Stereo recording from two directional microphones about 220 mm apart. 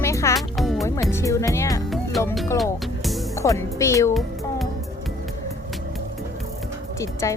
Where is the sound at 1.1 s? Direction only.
15° left (ahead or behind).